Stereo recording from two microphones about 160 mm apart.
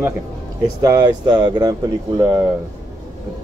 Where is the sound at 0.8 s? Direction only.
25° right (ahead or behind).